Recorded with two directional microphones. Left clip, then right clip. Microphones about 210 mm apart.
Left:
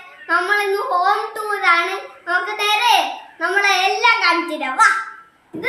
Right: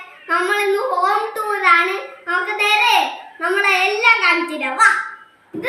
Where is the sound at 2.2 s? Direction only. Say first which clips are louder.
Right 1 dB; 10° left (ahead or behind).